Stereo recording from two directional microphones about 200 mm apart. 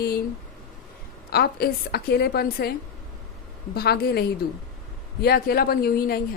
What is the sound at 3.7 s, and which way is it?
Speech, 50° left (ahead or behind).